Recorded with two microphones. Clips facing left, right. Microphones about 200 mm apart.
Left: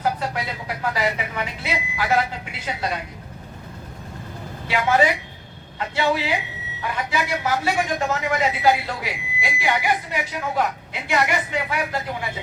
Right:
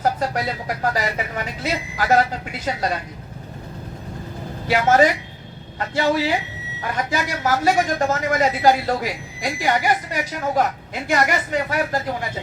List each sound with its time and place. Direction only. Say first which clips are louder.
0.0 s a man's voice: right 3 dB; 40° right (ahead or behind)
4.7 s a man's voice: right 3 dB; 40° right (ahead or behind)